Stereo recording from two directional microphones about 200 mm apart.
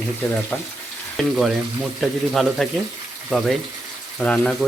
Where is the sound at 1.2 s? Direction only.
5° left (ahead or behind).